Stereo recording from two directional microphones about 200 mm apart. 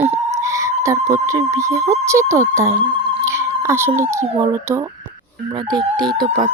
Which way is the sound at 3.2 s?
15° right (ahead or behind).